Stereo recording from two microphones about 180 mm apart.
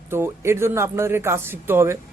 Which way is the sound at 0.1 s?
15° right (ahead or behind).